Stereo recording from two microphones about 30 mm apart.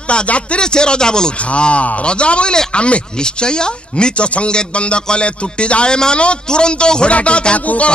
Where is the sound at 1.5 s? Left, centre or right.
Left.